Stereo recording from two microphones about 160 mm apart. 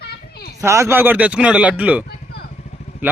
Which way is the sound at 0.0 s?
80° left.